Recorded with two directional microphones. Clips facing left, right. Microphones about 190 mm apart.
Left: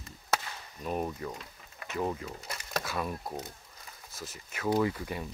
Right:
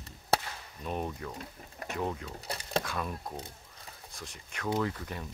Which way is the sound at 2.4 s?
35° right (ahead or behind).